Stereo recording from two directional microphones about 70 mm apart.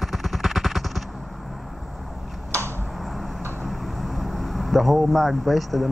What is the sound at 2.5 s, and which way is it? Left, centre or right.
Tick-tock, right.